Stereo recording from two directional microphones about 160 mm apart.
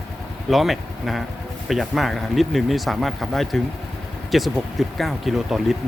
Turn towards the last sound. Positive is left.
turn(degrees=0)  # may be behind; listen again after turning